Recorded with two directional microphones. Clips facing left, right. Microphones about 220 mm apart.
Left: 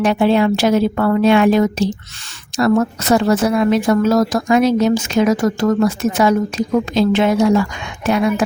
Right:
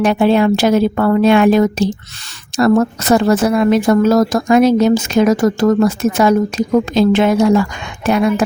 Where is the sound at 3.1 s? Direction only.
50° right (ahead or behind).